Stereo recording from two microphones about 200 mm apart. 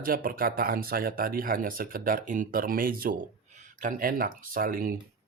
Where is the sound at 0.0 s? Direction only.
45° right (ahead or behind).